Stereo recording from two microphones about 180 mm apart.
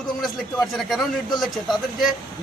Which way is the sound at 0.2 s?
Centre (ahead or behind).